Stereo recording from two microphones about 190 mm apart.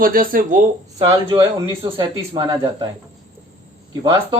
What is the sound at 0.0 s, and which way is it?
Speech, 50° right (ahead or behind).